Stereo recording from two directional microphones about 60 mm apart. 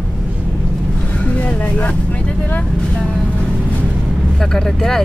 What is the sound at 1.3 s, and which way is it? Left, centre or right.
Vehicle, left.